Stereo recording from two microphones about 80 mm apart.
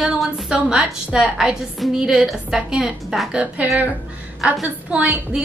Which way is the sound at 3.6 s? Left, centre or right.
Centre.